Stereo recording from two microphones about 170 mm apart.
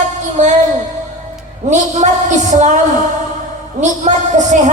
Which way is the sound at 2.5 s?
45° right (ahead or behind).